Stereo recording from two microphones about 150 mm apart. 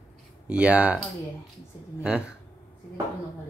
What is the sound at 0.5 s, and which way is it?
Speech, 10° right (ahead or behind).